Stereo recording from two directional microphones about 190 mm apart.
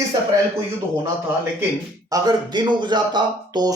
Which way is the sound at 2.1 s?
20° right (ahead or behind).